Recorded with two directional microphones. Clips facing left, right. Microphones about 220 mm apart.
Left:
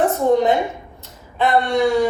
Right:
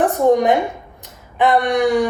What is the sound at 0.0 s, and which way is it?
A woman's voice, 15° right (ahead or behind).